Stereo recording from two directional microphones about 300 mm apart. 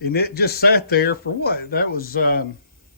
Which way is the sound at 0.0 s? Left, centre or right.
Left.